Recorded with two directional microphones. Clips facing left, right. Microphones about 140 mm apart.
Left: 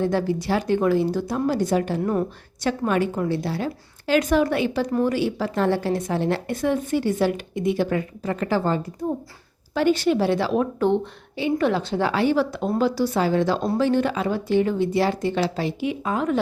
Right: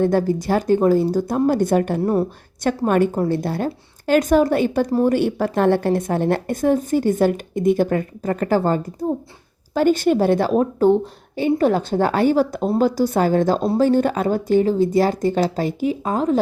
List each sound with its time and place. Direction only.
0.0 s a woman's voice: 45° right (ahead or behind)
2.0 s speech: 35° right (ahead or behind)
2.6 s a woman's voice: 50° right (ahead or behind)